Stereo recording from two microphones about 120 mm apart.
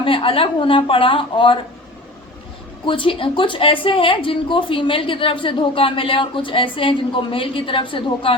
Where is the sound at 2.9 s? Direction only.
45° left (ahead or behind).